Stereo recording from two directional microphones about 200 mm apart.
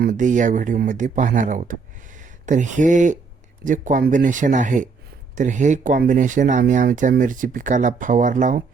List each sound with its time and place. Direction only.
0.0 s speech: 40° right (ahead or behind)